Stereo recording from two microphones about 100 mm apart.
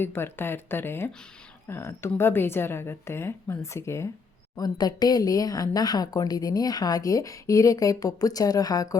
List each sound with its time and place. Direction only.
0.0 s a woman's voice: 20° left (ahead or behind)
4.5 s speech: 40° left (ahead or behind)